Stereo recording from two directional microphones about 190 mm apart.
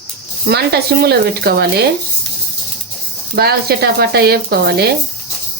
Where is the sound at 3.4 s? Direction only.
55° right (ahead or behind).